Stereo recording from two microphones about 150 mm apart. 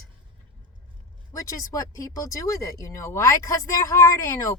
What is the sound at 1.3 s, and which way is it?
Speech, 20° left (ahead or behind).